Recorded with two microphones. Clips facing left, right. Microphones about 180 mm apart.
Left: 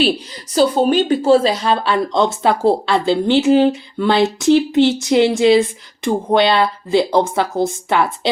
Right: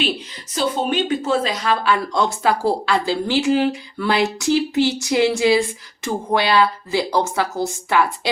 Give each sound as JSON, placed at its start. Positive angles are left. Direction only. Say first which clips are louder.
{"t": 0.5, "sound": "speech", "louder": "left 7 dB", "side_deg": 35}